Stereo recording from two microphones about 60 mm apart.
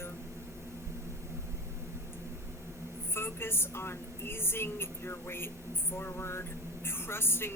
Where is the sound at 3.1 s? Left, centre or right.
Left.